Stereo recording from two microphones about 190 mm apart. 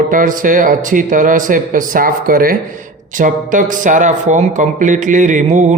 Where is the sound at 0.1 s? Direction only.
45° right (ahead or behind).